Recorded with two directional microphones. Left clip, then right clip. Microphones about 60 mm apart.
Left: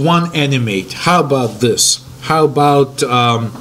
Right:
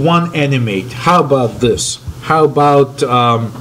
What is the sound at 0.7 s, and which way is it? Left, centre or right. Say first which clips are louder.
Speech: right 2 dB; centre.